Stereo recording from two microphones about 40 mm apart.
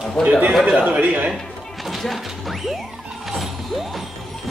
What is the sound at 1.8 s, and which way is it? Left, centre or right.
Speech, centre.